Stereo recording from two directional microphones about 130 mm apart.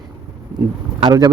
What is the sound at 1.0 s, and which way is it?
Speech, 30° right (ahead or behind).